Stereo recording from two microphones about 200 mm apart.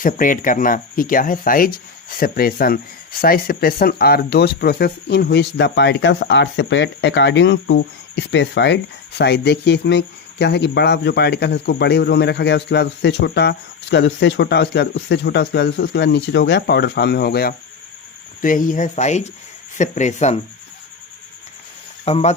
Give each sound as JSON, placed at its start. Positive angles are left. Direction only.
{"t": 0.0, "sound": "speech", "side_deg": 40}
{"t": 18.4, "sound": "speech", "side_deg": 40}
{"t": 22.0, "sound": "speech", "side_deg": 30}